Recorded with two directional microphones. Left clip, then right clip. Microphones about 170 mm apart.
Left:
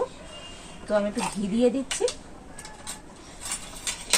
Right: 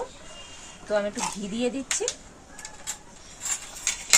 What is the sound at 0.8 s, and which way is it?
Speech, centre (ahead or behind).